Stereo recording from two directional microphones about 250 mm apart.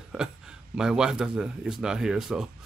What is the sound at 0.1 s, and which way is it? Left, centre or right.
Speech, centre.